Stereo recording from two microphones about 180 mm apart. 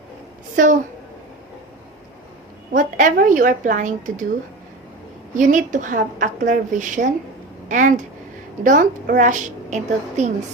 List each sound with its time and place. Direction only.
0.5 s a woman's voice: 45° right (ahead or behind)
2.7 s a woman's voice: 45° right (ahead or behind)
5.3 s a woman's voice: 45° right (ahead or behind)